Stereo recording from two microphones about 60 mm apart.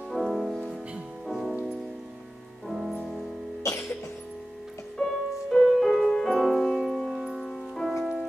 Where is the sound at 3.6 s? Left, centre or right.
Left.